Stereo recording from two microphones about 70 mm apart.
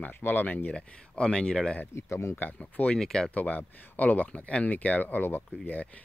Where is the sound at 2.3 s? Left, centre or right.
Left.